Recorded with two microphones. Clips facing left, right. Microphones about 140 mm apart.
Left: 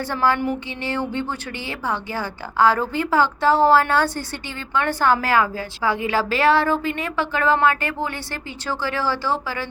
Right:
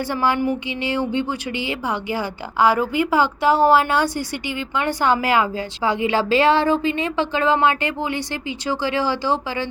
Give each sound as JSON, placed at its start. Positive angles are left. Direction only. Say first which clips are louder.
{"t": 0.0, "sound": "a woman's voice", "louder": "right 1 dB", "side_deg": -15}